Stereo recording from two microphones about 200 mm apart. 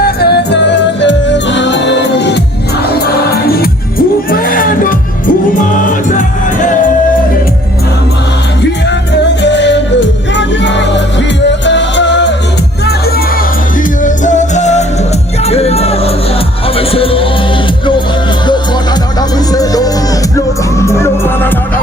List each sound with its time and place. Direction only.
0.0 s music: 55° left (ahead or behind)
4.3 s a sound: 45° left (ahead or behind)
5.7 s music: 40° left (ahead or behind)
9.4 s music: 60° left (ahead or behind)
14.0 s music: 40° left (ahead or behind)
19.5 s music: 20° left (ahead or behind)